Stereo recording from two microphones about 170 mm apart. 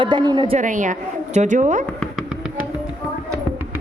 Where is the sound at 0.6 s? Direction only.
50° right (ahead or behind).